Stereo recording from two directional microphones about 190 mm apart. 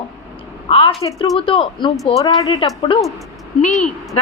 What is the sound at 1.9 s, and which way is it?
Speech, centre (ahead or behind).